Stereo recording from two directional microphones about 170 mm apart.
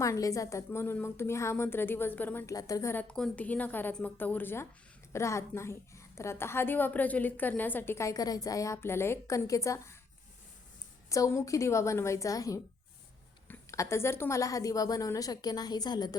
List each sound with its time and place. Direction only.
0.0 s a woman's voice: 20° left (ahead or behind)
11.1 s a woman's voice: 20° left (ahead or behind)